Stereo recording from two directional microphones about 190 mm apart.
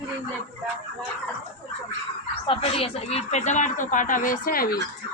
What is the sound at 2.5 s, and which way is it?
Speech, 30° left (ahead or behind).